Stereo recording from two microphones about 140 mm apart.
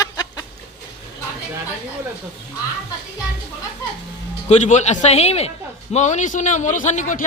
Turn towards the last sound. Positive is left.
turn(degrees=65)  # may be behind; listen again after turning